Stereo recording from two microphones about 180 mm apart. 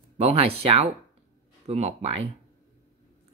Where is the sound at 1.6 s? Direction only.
35° right (ahead or behind).